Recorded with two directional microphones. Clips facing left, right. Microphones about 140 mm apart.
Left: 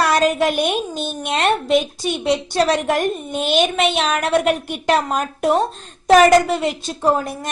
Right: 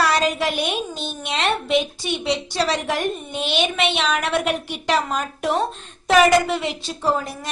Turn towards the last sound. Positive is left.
turn(degrees=50)  # may be behind; listen again after turning